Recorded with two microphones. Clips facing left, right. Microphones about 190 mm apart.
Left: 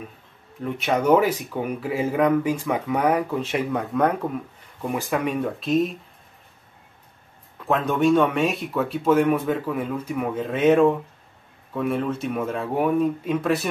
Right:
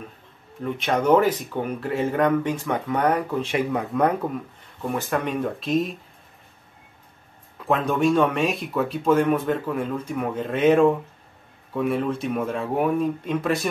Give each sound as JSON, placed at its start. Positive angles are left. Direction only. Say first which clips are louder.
{"t": 0.6, "sound": "speech", "louder": "even", "side_deg": 5}
{"t": 7.5, "sound": "speech", "louder": "even", "side_deg": 0}